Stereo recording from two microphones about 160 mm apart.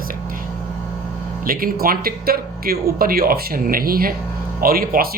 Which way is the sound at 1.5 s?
65° right (ahead or behind).